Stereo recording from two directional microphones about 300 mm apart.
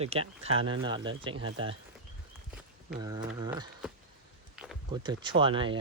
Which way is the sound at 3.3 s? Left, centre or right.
Centre.